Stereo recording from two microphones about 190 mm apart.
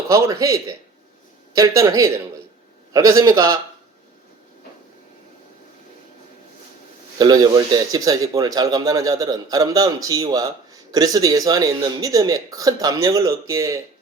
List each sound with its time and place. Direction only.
0.1 s a man's voice: 15° right (ahead or behind)
7.2 s a man's voice: 20° right (ahead or behind)